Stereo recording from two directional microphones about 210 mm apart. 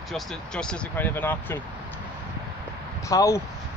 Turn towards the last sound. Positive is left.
turn(degrees=15)  # may be behind; listen again after turning